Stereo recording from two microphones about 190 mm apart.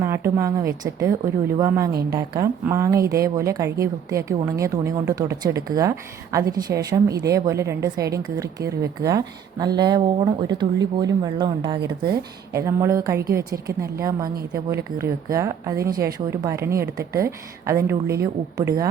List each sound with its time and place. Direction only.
0.0 s a woman's voice: 15° right (ahead or behind)
1.9 s a woman's voice: 55° right (ahead or behind)
2.1 s a woman's voice: 20° right (ahead or behind)
12.5 s a woman's voice: 15° right (ahead or behind)